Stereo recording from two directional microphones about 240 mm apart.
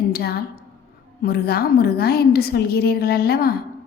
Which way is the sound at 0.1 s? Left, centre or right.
Left.